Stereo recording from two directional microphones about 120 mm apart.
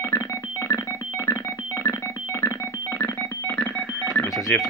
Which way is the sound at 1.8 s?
20° left (ahead or behind).